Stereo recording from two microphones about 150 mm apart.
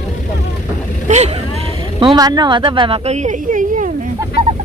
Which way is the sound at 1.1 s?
55° right (ahead or behind).